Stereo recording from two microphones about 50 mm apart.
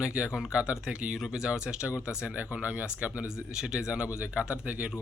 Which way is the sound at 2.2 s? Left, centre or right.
Right.